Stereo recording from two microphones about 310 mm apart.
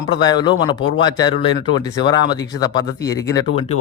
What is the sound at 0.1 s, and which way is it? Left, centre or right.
Speech, centre.